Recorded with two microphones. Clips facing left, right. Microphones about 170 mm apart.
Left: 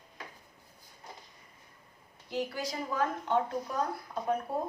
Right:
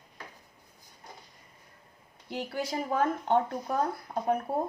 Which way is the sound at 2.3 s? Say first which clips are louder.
Right 2 dB; 60° right (ahead or behind).